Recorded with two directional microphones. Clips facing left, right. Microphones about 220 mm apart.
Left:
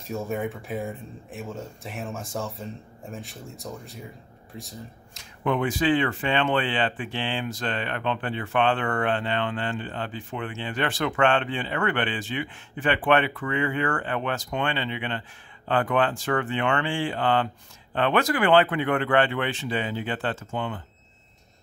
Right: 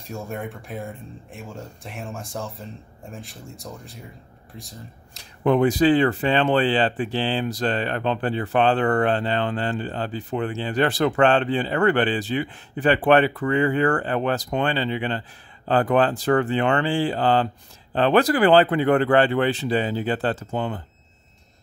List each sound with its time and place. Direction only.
0.0 s speech: centre (ahead or behind)
5.1 s speech: 35° right (ahead or behind)